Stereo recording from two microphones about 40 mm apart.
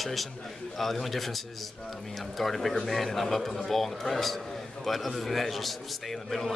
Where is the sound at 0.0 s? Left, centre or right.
Centre.